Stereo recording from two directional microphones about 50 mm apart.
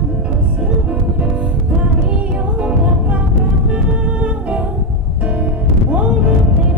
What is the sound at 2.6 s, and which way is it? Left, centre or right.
Music, right.